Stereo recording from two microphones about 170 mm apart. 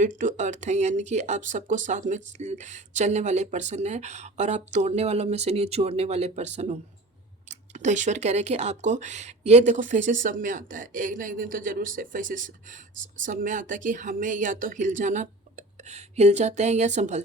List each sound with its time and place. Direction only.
0.2 s speech: 45° right (ahead or behind)